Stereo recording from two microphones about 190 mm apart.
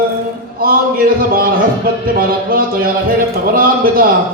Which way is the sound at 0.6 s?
50° right (ahead or behind).